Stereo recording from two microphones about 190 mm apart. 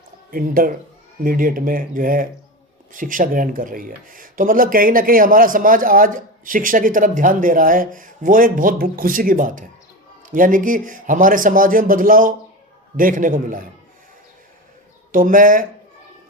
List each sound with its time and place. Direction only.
0.3 s speech: 50° right (ahead or behind)
15.1 s speech: 45° right (ahead or behind)